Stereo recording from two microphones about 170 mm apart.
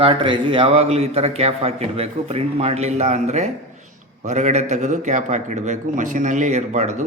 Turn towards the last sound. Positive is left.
turn(degrees=-45)  # may be behind; listen again after turning